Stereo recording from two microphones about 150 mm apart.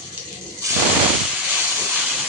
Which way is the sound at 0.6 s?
20° right (ahead or behind).